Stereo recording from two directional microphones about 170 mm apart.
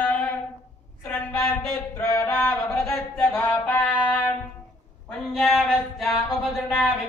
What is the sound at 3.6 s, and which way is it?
Music, 10° left (ahead or behind).